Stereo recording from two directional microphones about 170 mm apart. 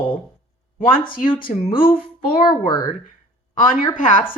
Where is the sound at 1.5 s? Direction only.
45° left (ahead or behind).